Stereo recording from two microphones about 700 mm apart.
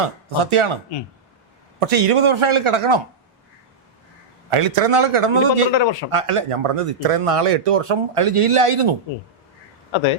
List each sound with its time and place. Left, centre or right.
0.5 s speech: right
1.9 s speech: right
4.5 s speech: right
5.7 s speech: left
6.1 s speech: right
9.9 s speech: left